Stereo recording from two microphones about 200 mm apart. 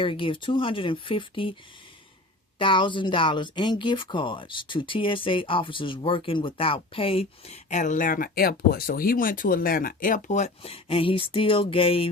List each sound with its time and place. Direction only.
0.0 s speech: 25° left (ahead or behind)
2.6 s speech: 25° left (ahead or behind)